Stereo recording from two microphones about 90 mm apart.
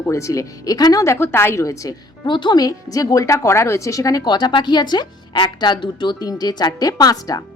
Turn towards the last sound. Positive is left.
turn(degrees=45)  # may be behind; listen again after turning